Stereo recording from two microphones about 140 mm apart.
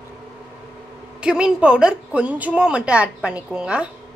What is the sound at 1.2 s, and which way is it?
A woman's voice, 5° right (ahead or behind).